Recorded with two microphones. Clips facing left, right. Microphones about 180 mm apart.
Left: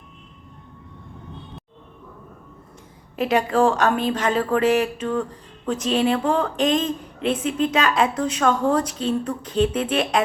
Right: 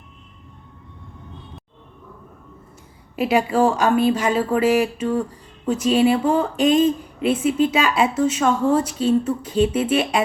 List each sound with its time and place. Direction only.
3.2 s speech: 10° right (ahead or behind)